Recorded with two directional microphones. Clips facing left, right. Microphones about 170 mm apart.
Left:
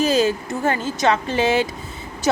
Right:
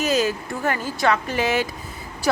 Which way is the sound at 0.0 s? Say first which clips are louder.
Left 3 dB; 30° left (ahead or behind).